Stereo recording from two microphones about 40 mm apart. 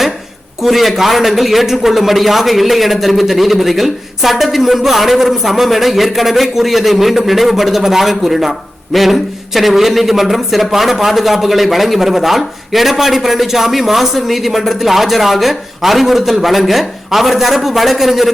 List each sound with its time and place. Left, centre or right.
0.6 s a man's voice: centre